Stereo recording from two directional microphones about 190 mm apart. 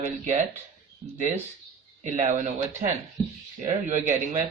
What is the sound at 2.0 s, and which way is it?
Speech, 40° right (ahead or behind).